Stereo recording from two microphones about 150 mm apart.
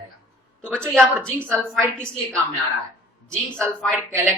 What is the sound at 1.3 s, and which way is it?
Speech, 15° right (ahead or behind).